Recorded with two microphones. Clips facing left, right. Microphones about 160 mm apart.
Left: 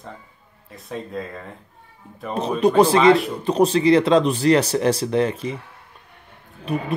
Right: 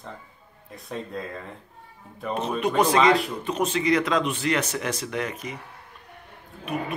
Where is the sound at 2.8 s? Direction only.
30° left (ahead or behind).